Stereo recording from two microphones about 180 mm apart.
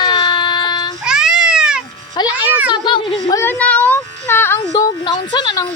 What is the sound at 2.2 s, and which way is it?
Speech, 20° left (ahead or behind).